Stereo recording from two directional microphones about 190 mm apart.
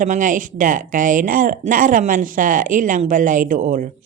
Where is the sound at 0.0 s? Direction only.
45° right (ahead or behind).